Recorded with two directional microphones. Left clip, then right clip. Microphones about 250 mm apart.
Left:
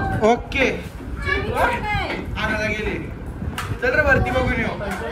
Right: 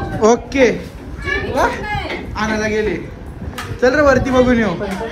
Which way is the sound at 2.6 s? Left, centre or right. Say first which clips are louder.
Right 6 dB; right.